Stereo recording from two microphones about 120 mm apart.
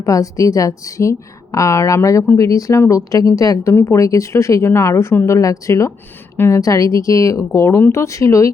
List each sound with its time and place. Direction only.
0.0 s speech: 30° left (ahead or behind)